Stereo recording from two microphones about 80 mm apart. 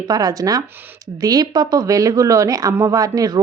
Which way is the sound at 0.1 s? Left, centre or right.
Right.